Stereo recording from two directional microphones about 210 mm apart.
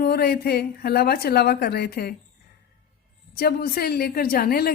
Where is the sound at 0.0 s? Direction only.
50° left (ahead or behind).